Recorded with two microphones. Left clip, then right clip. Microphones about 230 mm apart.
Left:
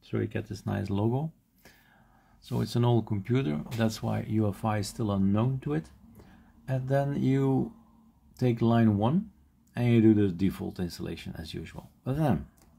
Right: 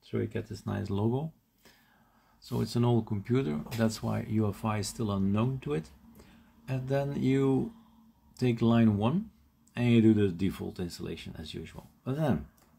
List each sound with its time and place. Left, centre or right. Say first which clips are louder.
0.0 s speech: left 1 dB; centre